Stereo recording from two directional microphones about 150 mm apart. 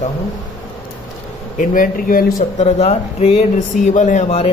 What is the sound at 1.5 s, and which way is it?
Speech, 65° left (ahead or behind).